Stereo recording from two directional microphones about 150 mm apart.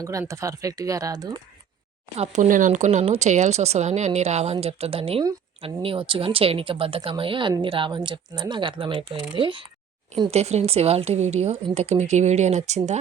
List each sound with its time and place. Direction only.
0.0 s speech: 20° right (ahead or behind)
2.1 s speech: 50° right (ahead or behind)
10.3 s speech: 45° right (ahead or behind)